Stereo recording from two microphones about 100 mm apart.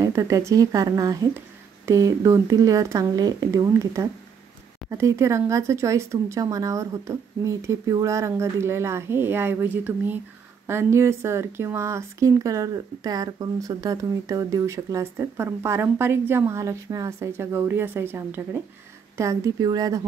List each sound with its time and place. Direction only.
0.0 s speech: 30° right (ahead or behind)
19.1 s speech: 35° right (ahead or behind)